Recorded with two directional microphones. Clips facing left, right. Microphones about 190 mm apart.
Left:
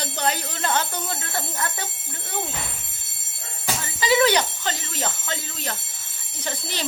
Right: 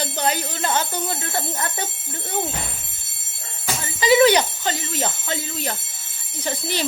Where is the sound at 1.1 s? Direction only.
20° right (ahead or behind).